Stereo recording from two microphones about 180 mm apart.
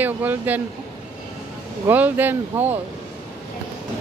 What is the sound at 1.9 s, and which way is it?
Speech, 10° right (ahead or behind).